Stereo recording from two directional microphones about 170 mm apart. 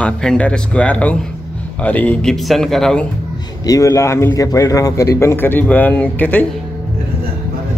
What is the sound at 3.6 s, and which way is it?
Speech, 20° left (ahead or behind).